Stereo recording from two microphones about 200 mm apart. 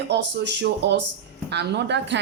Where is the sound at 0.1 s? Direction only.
60° right (ahead or behind).